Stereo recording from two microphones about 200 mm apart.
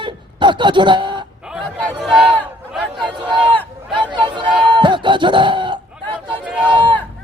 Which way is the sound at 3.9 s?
20° right (ahead or behind).